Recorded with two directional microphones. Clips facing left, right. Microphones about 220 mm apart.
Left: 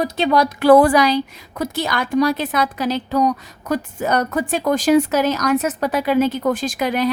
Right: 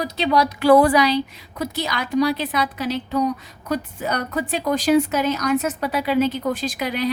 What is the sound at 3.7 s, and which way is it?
A woman's voice, 50° left (ahead or behind).